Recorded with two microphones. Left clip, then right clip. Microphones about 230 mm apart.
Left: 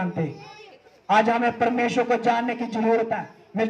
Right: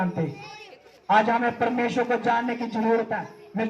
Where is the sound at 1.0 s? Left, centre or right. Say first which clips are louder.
Left 1 dB; left.